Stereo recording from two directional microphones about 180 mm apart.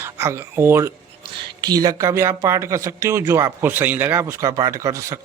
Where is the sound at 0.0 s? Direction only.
15° right (ahead or behind).